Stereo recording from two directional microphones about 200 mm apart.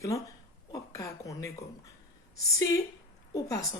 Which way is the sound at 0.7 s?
15° left (ahead or behind).